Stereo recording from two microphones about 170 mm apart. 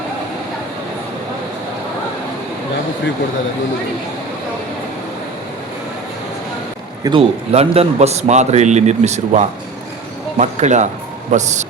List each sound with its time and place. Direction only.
7.0 s a man's voice: 30° right (ahead or behind)